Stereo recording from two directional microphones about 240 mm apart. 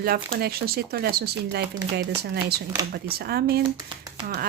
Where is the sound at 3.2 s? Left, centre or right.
Right.